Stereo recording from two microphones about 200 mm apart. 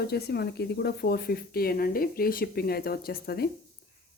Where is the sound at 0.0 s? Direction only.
55° left (ahead or behind).